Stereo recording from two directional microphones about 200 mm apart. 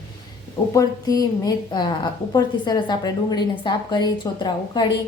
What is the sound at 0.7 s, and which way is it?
A woman's voice, 20° left (ahead or behind).